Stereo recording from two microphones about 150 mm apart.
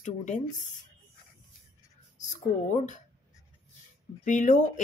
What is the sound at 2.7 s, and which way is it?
Speech, 50° left (ahead or behind).